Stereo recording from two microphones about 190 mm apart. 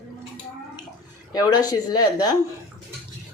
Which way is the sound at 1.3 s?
20° left (ahead or behind).